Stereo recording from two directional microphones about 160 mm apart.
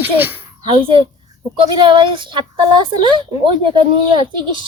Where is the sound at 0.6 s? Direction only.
35° right (ahead or behind).